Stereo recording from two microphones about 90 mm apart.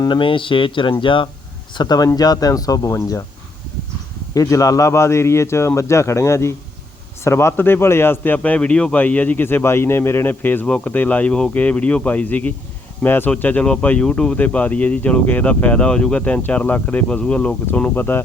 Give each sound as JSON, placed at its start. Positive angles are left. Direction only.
{"t": 0.0, "sound": "speech", "side_deg": 65}
{"t": 1.7, "sound": "speech", "side_deg": 50}
{"t": 4.4, "sound": "a man's voice", "side_deg": 35}